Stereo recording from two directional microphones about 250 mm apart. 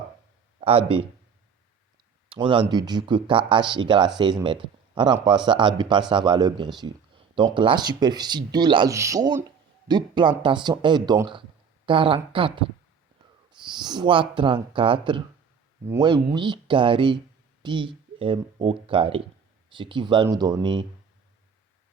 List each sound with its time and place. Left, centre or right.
0.6 s speech: right
2.3 s speech: centre